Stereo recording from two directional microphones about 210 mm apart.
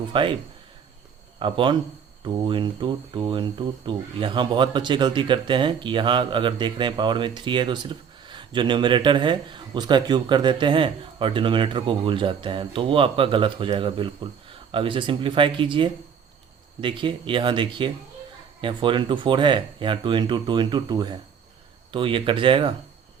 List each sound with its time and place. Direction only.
0.1 s speech: 25° right (ahead or behind)
1.4 s speech: 25° right (ahead or behind)